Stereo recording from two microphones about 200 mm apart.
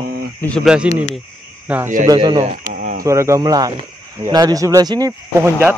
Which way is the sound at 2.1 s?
25° right (ahead or behind).